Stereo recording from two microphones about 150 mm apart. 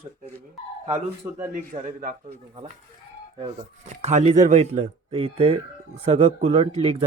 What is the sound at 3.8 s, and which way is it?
Speech, 50° right (ahead or behind).